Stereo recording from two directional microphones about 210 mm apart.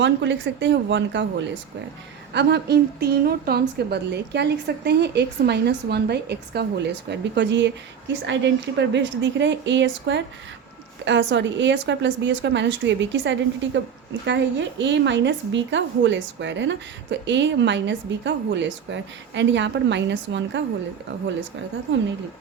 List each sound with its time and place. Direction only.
0.0 s a woman's voice: 60° right (ahead or behind)